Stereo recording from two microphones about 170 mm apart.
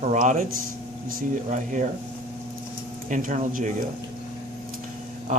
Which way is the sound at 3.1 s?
50° right (ahead or behind).